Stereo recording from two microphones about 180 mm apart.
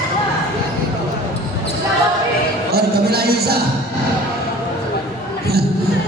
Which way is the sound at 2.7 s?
60° right (ahead or behind).